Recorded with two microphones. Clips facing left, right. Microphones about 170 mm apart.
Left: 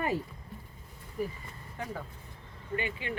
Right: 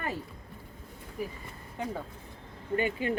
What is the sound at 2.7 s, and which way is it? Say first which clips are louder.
Speech: right 6 dB; 45° right (ahead or behind).